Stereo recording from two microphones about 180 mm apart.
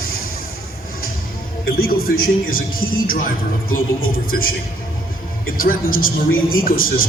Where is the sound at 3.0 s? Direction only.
50° left (ahead or behind).